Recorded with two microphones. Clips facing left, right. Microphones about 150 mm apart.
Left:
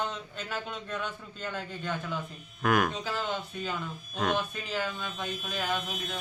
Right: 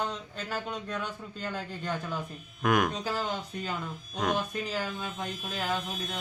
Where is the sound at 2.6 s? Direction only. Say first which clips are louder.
Even; 20° right (ahead or behind).